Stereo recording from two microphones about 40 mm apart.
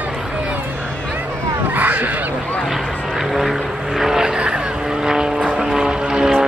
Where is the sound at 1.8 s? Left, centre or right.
Right.